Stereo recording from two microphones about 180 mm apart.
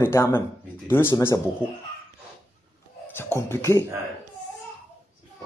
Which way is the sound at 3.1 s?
15° left (ahead or behind).